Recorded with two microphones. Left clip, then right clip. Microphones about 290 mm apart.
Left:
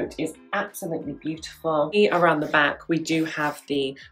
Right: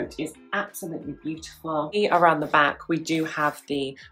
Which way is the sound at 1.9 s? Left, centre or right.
Centre.